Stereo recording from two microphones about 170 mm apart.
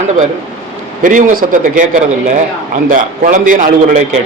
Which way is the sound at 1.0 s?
55° right (ahead or behind).